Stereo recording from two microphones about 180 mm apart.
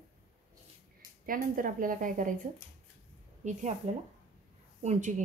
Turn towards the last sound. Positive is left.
turn(degrees=-40)  # may be behind; listen again after turning